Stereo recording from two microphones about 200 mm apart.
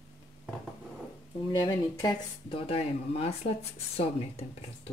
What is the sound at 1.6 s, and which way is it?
Speech, 20° left (ahead or behind).